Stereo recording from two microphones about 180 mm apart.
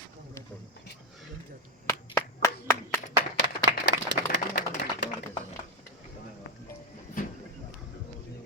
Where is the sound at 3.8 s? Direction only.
80° left.